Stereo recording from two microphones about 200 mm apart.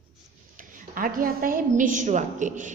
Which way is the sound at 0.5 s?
40° right (ahead or behind).